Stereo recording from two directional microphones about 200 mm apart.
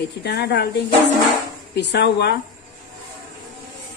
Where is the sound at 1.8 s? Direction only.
60° left (ahead or behind).